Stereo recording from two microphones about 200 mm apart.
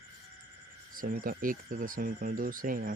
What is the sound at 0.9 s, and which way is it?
Speech, 45° right (ahead or behind).